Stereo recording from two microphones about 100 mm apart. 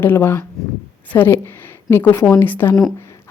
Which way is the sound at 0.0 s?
20° left (ahead or behind).